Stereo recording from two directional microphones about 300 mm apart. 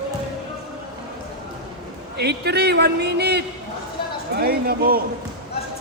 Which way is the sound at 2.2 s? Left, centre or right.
Right.